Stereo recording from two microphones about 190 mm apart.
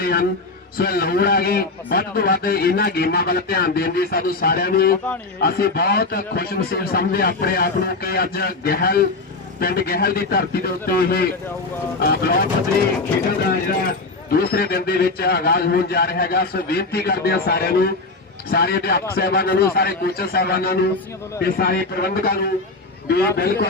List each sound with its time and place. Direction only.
0.0 s a man's voice: 55° left (ahead or behind)
14.3 s a man's voice: 55° left (ahead or behind)